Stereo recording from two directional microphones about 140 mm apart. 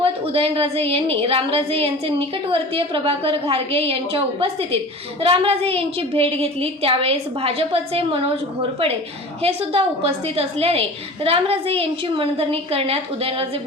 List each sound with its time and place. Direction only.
0.0 s a woman's voice: 40° right (ahead or behind)
9.4 s a woman's voice: 45° right (ahead or behind)